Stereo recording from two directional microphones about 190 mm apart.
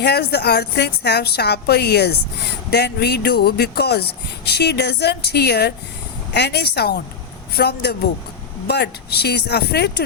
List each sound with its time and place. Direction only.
0.0 s a woman's voice: 60° left (ahead or behind)